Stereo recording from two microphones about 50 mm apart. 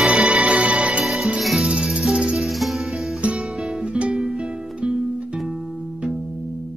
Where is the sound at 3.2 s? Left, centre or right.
Right.